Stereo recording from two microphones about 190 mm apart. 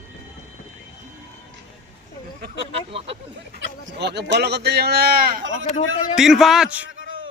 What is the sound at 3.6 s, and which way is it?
Speech, 60° right (ahead or behind).